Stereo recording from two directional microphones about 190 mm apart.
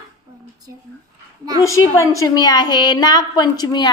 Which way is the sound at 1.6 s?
15° left (ahead or behind).